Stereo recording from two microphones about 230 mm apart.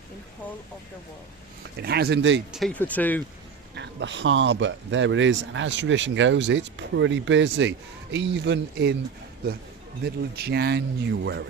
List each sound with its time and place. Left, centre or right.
1.8 s speech: right
2.5 s speech: centre
3.8 s speech: right
10.3 s speech: right